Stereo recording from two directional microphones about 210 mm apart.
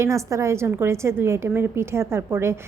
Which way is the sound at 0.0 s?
15° right (ahead or behind).